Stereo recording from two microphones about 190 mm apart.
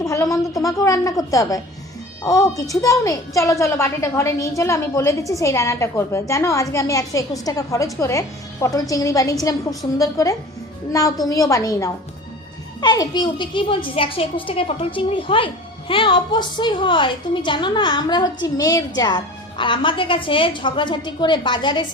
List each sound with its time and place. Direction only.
0.0 s a woman's voice: 15° left (ahead or behind)